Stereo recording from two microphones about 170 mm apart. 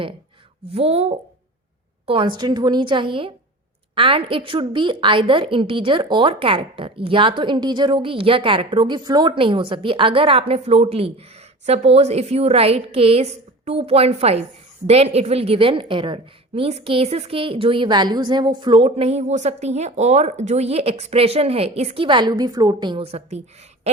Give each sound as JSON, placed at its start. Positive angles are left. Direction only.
{"t": 0.7, "sound": "a woman's voice", "side_deg": -35}